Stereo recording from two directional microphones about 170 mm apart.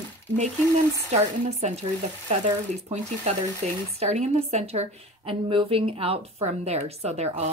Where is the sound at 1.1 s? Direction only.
40° right (ahead or behind).